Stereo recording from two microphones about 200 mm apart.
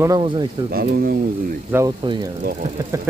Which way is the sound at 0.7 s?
50° right (ahead or behind).